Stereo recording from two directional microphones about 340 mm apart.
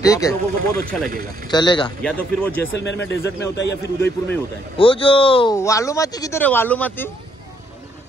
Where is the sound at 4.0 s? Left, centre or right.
Centre.